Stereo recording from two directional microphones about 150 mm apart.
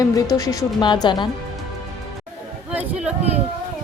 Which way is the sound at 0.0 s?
25° left (ahead or behind).